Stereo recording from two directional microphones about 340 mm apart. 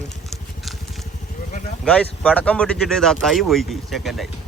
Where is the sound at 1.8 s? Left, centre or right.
Centre.